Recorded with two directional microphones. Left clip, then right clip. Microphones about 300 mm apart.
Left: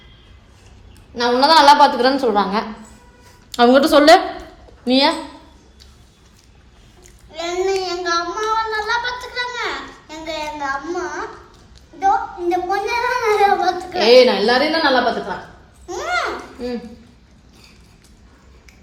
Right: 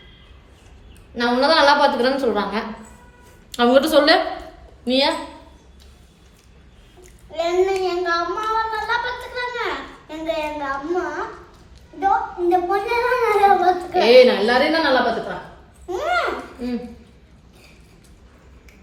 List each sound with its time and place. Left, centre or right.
1.1 s a woman's voice: centre
7.3 s child singing: centre
7.9 s a child's voice: centre
13.9 s a woman's voice: centre
15.9 s a sound: centre